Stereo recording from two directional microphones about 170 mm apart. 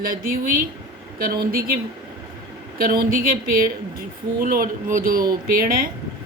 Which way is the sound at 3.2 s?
55° right (ahead or behind).